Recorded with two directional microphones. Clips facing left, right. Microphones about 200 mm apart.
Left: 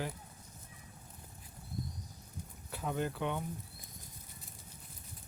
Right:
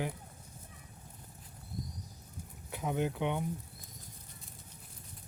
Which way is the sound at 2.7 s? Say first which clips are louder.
Right 3 dB; 15° right (ahead or behind).